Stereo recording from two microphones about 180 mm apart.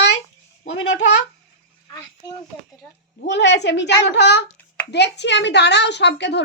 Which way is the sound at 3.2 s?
80° left.